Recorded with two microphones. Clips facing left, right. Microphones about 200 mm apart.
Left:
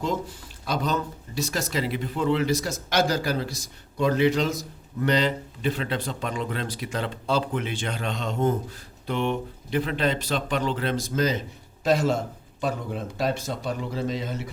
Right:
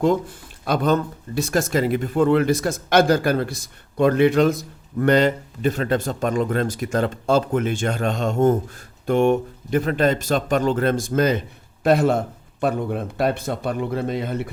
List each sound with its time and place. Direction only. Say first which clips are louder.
0.6 s a man's voice: right 7 dB; 55° right (ahead or behind)